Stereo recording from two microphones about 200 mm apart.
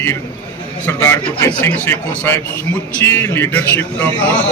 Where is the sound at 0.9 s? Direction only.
15° left (ahead or behind).